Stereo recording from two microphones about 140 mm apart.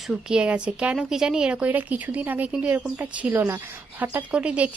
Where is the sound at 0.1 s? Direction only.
5° right (ahead or behind).